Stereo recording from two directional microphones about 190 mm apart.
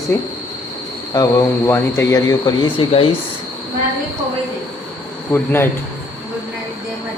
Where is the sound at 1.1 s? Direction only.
20° left (ahead or behind).